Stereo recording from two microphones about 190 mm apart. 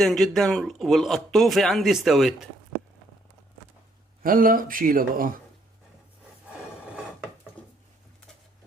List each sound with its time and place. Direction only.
0.0 s speech: centre (ahead or behind)
4.2 s speech: 50° right (ahead or behind)